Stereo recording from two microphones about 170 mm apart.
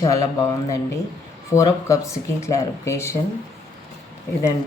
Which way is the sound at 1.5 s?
20° left (ahead or behind).